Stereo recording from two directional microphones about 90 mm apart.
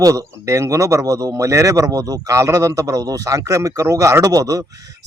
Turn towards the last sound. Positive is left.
turn(degrees=-40)  # may be behind; listen again after turning